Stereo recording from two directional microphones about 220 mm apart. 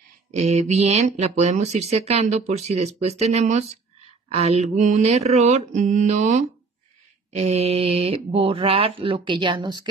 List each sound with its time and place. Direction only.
0.3 s speech: 30° right (ahead or behind)
4.3 s mantra: 30° right (ahead or behind)
7.3 s speech: 30° right (ahead or behind)